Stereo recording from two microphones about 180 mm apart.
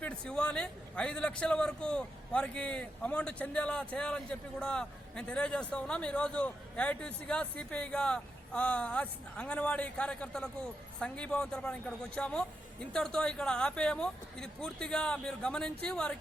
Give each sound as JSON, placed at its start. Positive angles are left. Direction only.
{"t": 0.0, "sound": "a man's voice", "side_deg": 5}